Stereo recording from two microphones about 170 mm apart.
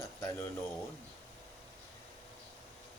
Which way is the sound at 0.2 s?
20° left (ahead or behind).